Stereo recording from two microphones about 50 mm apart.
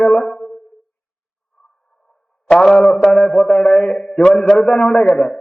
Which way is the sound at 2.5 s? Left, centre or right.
Centre.